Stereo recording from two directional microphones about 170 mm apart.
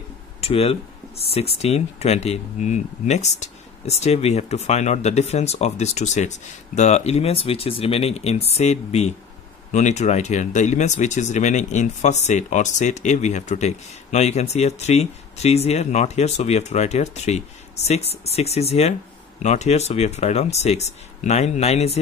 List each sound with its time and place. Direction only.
0.4 s speech: 35° left (ahead or behind)